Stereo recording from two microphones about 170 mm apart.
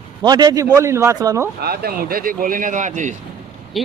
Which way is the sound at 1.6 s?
65° right (ahead or behind).